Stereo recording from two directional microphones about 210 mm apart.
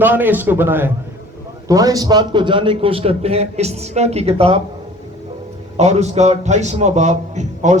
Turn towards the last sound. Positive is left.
turn(degrees=-35)  # may be behind; listen again after turning